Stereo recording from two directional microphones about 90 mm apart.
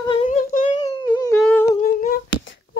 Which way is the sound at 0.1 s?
85° left.